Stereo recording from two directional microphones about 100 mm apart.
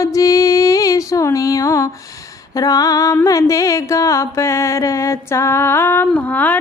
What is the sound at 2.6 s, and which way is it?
Female singing, 35° left (ahead or behind).